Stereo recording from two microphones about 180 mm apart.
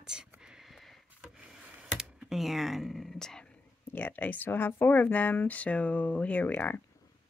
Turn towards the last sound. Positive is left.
turn(degrees=10)  # may be behind; listen again after turning